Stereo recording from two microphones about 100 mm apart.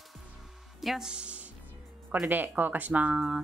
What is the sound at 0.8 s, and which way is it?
Speech, 5° right (ahead or behind).